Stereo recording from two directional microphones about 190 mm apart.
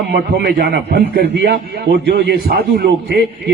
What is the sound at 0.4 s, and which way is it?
A man's voice, 60° right (ahead or behind).